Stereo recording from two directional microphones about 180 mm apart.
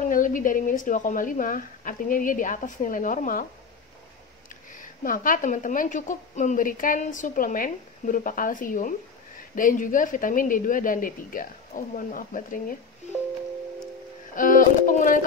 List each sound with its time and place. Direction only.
0.0 s speech: 45° left (ahead or behind)
4.5 s speech: 50° left (ahead or behind)
14.3 s speech: 50° left (ahead or behind)